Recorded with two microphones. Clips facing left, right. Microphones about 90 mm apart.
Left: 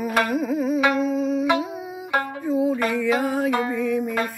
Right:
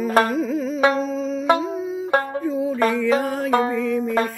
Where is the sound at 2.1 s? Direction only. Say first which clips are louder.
Right 3 dB; 35° right (ahead or behind).